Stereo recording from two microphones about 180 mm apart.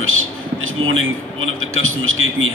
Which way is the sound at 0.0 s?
90° right.